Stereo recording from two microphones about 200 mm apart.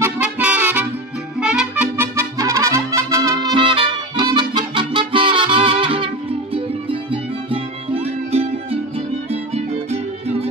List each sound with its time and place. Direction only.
0.0 s music: 5° right (ahead or behind)
1.4 s trumpet: 5° right (ahead or behind); by 6.0 s 25° right (ahead or behind)
6.5 s music: 25° right (ahead or behind)